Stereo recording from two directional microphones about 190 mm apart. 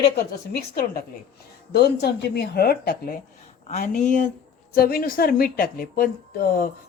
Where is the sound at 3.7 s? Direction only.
40° left (ahead or behind).